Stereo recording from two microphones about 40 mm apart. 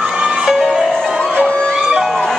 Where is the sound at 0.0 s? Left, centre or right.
Centre.